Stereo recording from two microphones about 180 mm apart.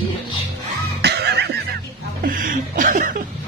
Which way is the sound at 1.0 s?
65° right (ahead or behind).